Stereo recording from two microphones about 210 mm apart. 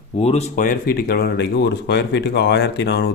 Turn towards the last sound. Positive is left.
turn(degrees=50)  # may be behind; listen again after turning